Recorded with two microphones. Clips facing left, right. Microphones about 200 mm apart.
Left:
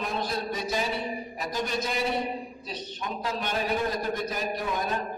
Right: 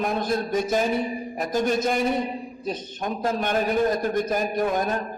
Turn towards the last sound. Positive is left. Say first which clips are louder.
# right 6 dB
turn(degrees=-50)  # may be behind; listen again after turning